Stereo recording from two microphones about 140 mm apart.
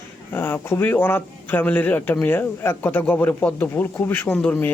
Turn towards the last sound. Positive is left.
turn(degrees=5)  # may be behind; listen again after turning